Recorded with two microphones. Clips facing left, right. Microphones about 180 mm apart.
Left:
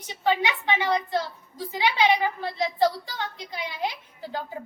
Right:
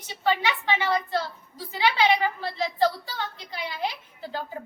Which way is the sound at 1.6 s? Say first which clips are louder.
Even; 15° left (ahead or behind).